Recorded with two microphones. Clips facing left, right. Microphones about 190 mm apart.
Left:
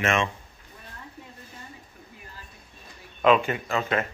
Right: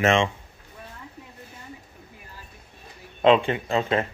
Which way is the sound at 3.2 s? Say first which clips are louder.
Right 2 dB; 25° right (ahead or behind).